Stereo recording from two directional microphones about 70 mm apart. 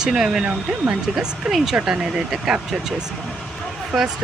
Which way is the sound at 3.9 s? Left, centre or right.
Centre.